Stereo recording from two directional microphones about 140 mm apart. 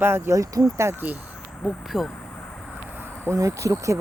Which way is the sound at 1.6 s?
Centre (ahead or behind).